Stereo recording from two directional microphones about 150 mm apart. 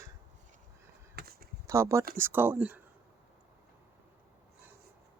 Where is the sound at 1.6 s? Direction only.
20° right (ahead or behind).